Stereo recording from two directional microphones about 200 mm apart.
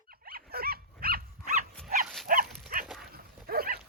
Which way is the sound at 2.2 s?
45° right (ahead or behind).